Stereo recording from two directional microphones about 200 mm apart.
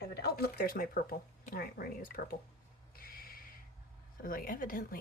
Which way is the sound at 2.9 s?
45° left (ahead or behind).